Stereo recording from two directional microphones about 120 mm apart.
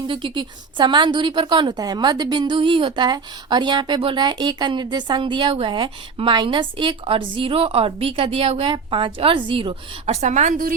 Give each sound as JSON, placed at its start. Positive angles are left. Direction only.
{"t": 0.1, "sound": "a woman's voice", "side_deg": -45}